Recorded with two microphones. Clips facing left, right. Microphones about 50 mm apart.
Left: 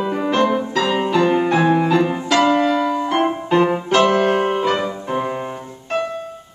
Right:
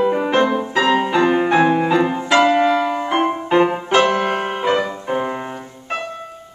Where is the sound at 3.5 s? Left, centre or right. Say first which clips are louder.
Right 1 dB; centre.